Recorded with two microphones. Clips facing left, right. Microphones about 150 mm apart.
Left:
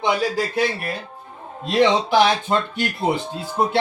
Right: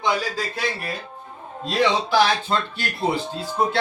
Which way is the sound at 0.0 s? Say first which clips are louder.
Left 3 dB; 25° left (ahead or behind).